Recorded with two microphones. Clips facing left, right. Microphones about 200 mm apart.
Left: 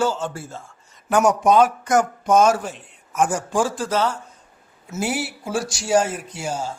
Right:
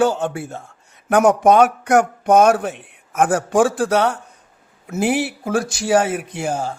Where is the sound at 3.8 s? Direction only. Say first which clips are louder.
Right 5 dB; 70° right (ahead or behind).